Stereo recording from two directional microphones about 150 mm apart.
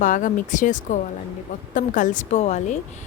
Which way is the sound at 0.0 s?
60° left (ahead or behind).